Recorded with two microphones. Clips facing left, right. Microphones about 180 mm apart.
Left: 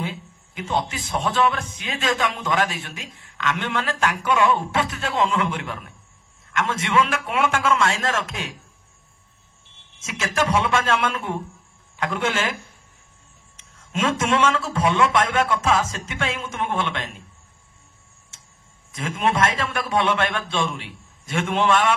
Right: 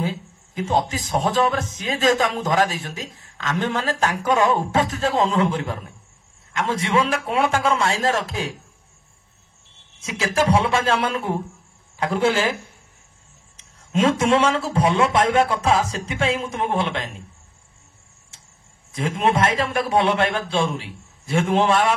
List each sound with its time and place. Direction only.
0.0 s speech: 35° right (ahead or behind)
10.0 s speech: 35° right (ahead or behind)
13.7 s speech: 35° right (ahead or behind)
18.9 s speech: 25° right (ahead or behind)